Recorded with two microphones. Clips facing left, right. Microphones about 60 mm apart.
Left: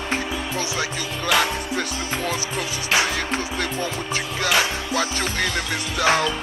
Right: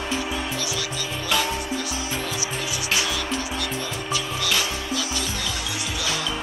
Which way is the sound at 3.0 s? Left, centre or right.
Left.